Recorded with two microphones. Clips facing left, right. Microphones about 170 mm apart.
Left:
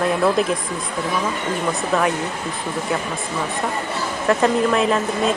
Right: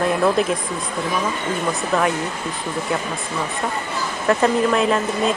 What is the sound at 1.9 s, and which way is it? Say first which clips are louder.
Speech: even; centre (ahead or behind).